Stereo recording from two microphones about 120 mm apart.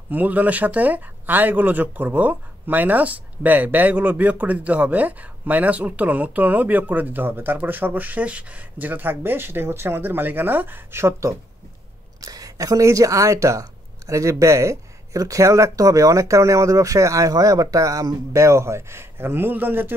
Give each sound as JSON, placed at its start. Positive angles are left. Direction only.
{"t": 0.1, "sound": "speech", "side_deg": -15}